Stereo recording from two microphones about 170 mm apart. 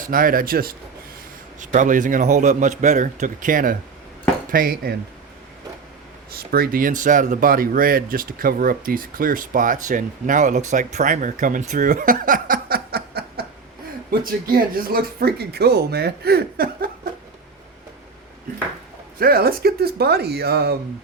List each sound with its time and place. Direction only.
0.0 s speech: 55° right (ahead or behind)
1.5 s speech: 50° right (ahead or behind)
6.3 s speech: 65° right (ahead or behind)
19.2 s speech: 60° right (ahead or behind)